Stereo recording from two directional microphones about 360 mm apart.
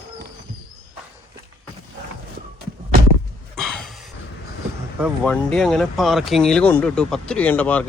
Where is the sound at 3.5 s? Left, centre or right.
Centre.